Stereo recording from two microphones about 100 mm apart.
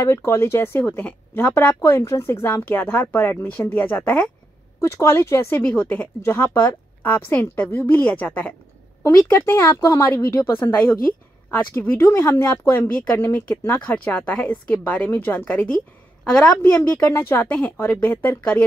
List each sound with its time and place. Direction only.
0.0 s speech: 25° left (ahead or behind)
5.6 s speech: 15° left (ahead or behind)